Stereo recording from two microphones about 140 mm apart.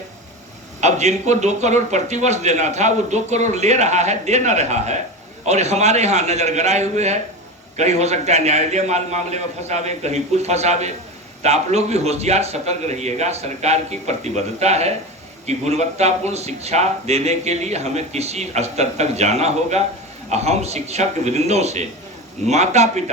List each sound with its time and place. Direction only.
0.8 s a man's voice: 55° right (ahead or behind)